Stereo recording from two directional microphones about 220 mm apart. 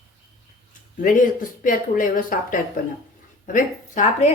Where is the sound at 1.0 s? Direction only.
35° left (ahead or behind).